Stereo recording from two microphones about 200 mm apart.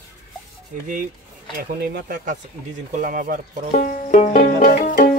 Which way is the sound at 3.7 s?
40° left (ahead or behind).